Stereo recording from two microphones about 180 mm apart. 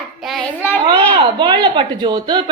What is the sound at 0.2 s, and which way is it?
Speech, centre (ahead or behind).